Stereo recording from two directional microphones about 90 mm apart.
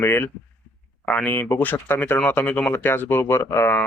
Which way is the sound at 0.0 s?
25° left (ahead or behind).